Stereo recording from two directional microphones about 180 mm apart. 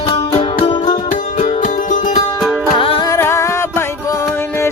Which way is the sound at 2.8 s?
30° left (ahead or behind).